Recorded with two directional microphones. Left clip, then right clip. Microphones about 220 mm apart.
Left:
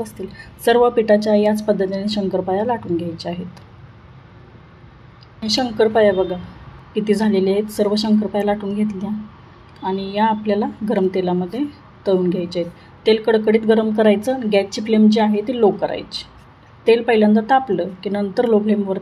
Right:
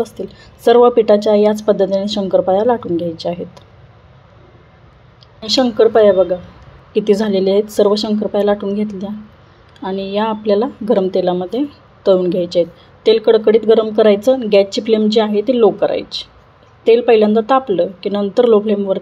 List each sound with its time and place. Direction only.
0.0 s a woman's voice: 25° right (ahead or behind)
5.5 s a woman's voice: 25° right (ahead or behind)